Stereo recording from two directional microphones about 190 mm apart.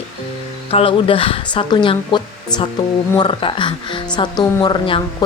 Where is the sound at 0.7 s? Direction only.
30° left (ahead or behind).